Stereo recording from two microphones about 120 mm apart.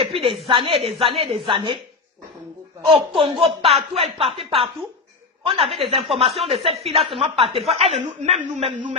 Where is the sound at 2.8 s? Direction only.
50° right (ahead or behind).